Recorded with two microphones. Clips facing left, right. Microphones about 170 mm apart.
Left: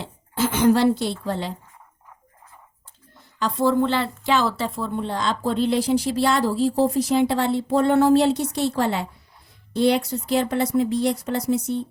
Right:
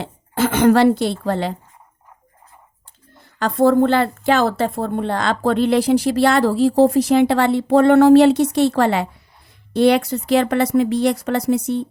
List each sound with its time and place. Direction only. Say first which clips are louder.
0.0 s a sound: right 4 dB; 60° right (ahead or behind)
1.2 s a woman's voice: right 6 dB; 70° right (ahead or behind)
3.3 s a woman's voice: right 6 dB; 55° right (ahead or behind); by 11.9 s 75° right (ahead or behind)